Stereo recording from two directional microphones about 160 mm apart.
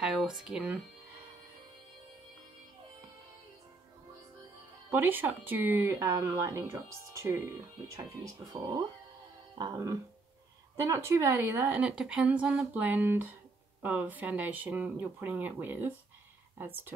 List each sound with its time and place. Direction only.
0.0 s speech: centre (ahead or behind)
4.9 s speech: 10° right (ahead or behind)